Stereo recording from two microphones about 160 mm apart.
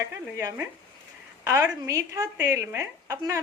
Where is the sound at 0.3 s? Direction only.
15° right (ahead or behind).